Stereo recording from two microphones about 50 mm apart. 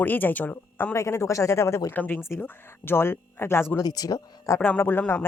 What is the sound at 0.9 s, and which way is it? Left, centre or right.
Speech, left.